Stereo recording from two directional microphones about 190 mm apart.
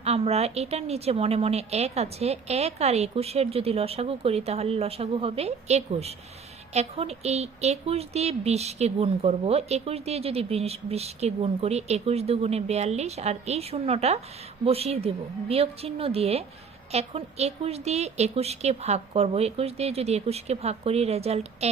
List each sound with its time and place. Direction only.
0.0 s speech: 35° right (ahead or behind)